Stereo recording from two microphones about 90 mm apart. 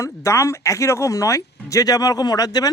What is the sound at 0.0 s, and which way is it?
Speech, 35° left (ahead or behind).